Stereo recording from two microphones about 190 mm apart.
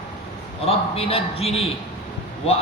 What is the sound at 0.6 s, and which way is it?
A man's voice, 30° left (ahead or behind).